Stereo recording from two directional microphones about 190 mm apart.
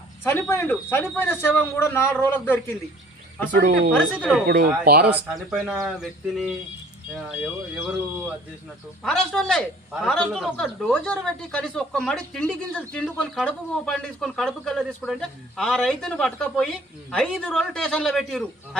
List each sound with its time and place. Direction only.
0.3 s speech: 10° left (ahead or behind)
3.5 s speech: 55° right (ahead or behind)
4.2 s a man's voice: 5° left (ahead or behind)
4.4 s speech: 55° right (ahead or behind)
5.1 s a man's voice: centre (ahead or behind)
9.0 s a man's voice: 5° left (ahead or behind)